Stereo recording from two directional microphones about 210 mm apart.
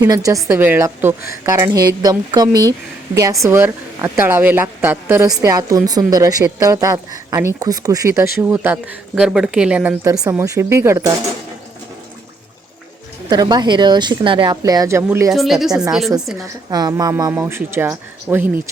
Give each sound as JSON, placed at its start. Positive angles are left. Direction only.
{"t": 0.0, "sound": "a woman's voice", "side_deg": -15}
{"t": 13.3, "sound": "a woman's voice", "side_deg": -20}
{"t": 15.3, "sound": "speech", "side_deg": 0}
{"t": 16.6, "sound": "a woman's voice", "side_deg": -20}